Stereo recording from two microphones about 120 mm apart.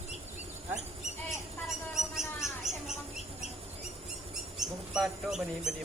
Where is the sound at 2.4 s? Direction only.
5° right (ahead or behind).